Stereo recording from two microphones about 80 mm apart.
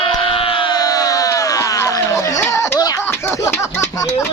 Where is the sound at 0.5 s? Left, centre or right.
Left.